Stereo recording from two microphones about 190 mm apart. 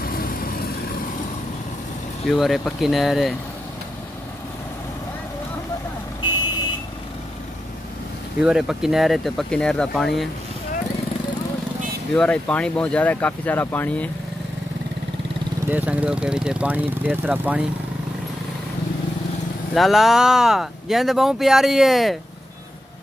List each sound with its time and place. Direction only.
0.0 s vehicle: 50° left (ahead or behind)
2.3 s speech: centre (ahead or behind)
8.4 s speech: 5° right (ahead or behind)
12.1 s speech: 5° left (ahead or behind)
15.7 s speech: 10° right (ahead or behind)
19.7 s speech: centre (ahead or behind)